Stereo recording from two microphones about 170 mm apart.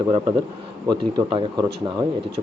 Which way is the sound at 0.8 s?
25° right (ahead or behind).